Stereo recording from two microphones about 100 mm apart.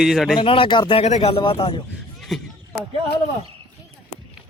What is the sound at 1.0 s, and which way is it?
Speech, 70° left (ahead or behind).